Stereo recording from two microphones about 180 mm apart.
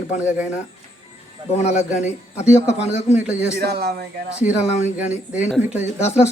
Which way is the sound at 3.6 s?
60° right (ahead or behind).